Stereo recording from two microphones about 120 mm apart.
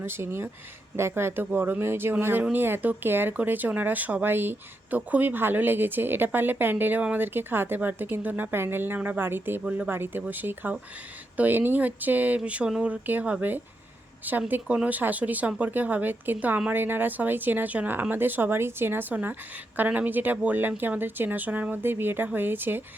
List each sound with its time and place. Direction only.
0.0 s speech: 20° right (ahead or behind)